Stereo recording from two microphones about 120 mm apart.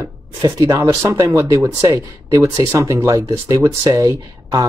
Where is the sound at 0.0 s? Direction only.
30° right (ahead or behind).